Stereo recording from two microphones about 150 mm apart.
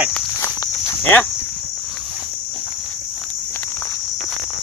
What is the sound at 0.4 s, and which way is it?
Cricket, 15° left (ahead or behind).